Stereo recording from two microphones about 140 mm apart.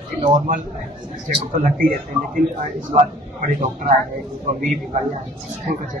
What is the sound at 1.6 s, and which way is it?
Speech, 90° right.